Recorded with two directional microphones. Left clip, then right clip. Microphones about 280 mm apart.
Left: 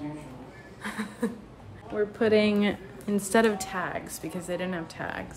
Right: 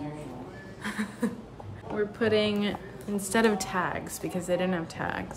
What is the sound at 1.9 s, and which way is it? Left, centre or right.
A woman's voice, centre.